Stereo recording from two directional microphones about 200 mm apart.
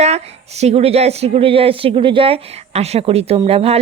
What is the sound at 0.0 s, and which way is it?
Speech, 35° right (ahead or behind).